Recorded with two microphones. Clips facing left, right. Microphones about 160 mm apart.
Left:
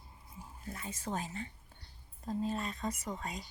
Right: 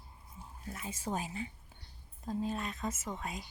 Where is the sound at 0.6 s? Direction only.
10° right (ahead or behind).